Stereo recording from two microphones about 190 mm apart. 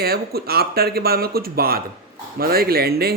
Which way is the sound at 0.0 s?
55° right (ahead or behind).